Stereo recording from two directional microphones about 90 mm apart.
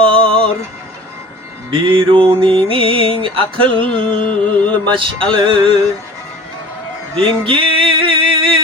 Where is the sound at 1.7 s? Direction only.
70° right (ahead or behind).